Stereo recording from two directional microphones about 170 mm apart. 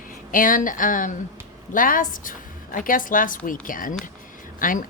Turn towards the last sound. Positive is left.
turn(degrees=50)  # may be behind; listen again after turning